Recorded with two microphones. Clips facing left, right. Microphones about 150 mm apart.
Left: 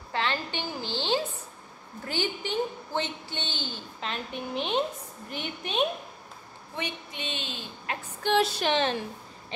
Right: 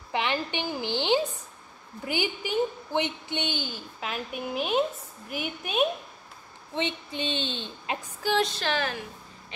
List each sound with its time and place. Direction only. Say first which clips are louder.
0.1 s a sound: right 2 dB; 15° right (ahead or behind)
2.0 s a woman's voice: right 1 dB; 10° right (ahead or behind)
6.7 s a woman's voice: right 5 dB; 25° right (ahead or behind)
8.2 s female singing: left 2 dB; centre (ahead or behind)
8.7 s a woman's voice: left 4 dB; 25° left (ahead or behind)